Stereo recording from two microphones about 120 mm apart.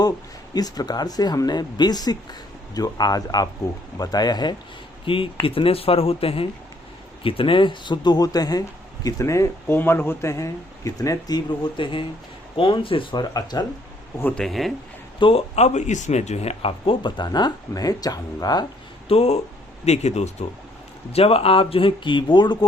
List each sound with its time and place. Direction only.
0.5 s speech: 35° left (ahead or behind)
5.0 s speech: 45° left (ahead or behind)
13.3 s speech: 35° left (ahead or behind)
14.3 s speech: centre (ahead or behind)
15.2 s speech: 55° left (ahead or behind); by 18.6 s 35° left (ahead or behind)
19.0 s speech: 55° left (ahead or behind)
21.1 s speech: 55° left (ahead or behind)